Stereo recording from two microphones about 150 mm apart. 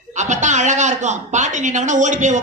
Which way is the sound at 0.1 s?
50° right (ahead or behind).